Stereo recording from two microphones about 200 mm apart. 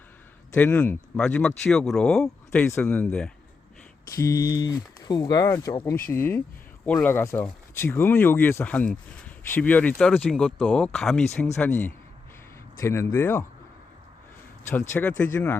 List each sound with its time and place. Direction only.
0.5 s speech: 5° left (ahead or behind)
14.7 s speech: 10° left (ahead or behind)